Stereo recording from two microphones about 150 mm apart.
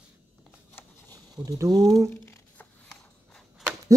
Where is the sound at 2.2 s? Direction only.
15° left (ahead or behind).